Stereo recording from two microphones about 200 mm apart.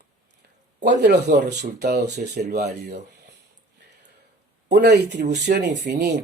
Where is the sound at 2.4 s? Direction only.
35° right (ahead or behind).